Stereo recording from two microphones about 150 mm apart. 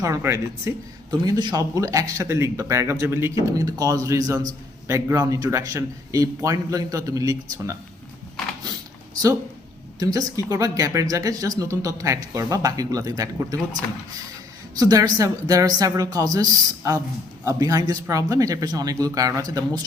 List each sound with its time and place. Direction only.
0.0 s speech: 20° right (ahead or behind)
10.0 s speech: 25° right (ahead or behind)
14.8 s speech: 25° right (ahead or behind)